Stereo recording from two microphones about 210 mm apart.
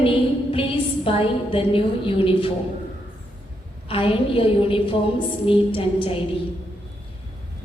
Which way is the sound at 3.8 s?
25° left (ahead or behind).